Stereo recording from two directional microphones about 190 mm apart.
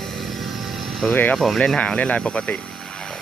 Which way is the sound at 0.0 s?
Centre (ahead or behind).